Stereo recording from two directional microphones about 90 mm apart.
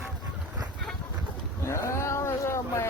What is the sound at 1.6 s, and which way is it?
Vehicle, 30° left (ahead or behind).